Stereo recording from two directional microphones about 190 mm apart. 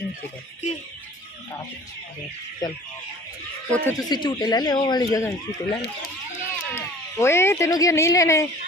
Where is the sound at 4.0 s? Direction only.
25° left (ahead or behind).